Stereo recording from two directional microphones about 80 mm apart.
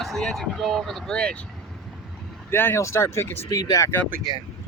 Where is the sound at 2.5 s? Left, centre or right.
Left.